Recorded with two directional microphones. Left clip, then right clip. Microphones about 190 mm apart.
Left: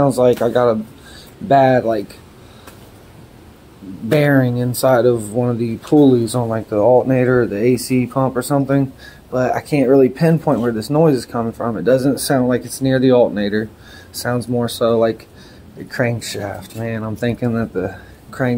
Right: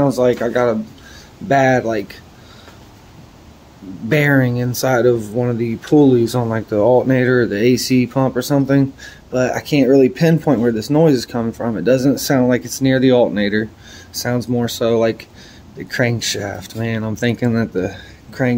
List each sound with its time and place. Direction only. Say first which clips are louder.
0.0 s speech: left 2 dB; centre (ahead or behind)
4.1 s speech: even; 10° right (ahead or behind); by 10.8 s 25° right (ahead or behind)
10.8 s speech: right 1 dB; 15° right (ahead or behind)